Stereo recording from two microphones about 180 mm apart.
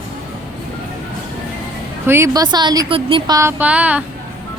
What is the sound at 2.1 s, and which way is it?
Speech, 15° right (ahead or behind).